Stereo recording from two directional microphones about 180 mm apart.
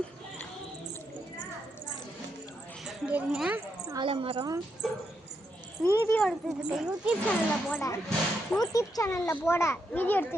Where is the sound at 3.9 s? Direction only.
25° right (ahead or behind).